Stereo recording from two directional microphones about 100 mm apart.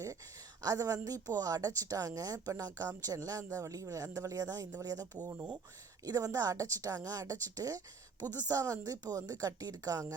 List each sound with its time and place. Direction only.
0.6 s speech: 35° right (ahead or behind)